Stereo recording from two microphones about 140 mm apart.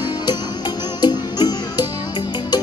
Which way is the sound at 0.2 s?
30° left (ahead or behind).